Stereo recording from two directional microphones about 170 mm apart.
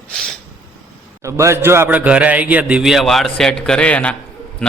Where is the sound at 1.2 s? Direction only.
15° right (ahead or behind).